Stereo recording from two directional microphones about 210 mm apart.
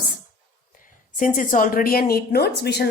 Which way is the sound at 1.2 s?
40° left (ahead or behind).